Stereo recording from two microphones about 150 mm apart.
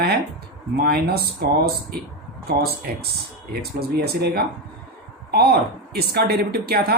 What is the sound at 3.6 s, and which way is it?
A woman's voice, 90° right.